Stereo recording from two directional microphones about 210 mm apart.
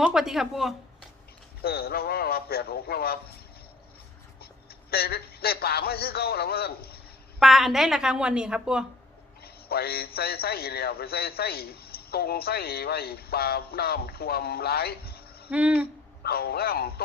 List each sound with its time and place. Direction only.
0.0 s a woman's voice: centre (ahead or behind)
1.6 s a man's voice: 45° left (ahead or behind)
4.4 s a man's voice: 45° left (ahead or behind)
7.3 s a woman's voice: centre (ahead or behind)
9.4 s a man's voice: 50° left (ahead or behind)
15.4 s a sound: 5° right (ahead or behind)
16.2 s a man's voice: 45° left (ahead or behind)